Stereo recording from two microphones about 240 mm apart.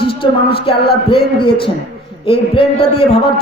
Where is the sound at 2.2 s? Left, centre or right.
Left.